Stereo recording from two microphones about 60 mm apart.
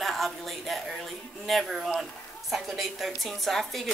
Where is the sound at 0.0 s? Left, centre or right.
Centre.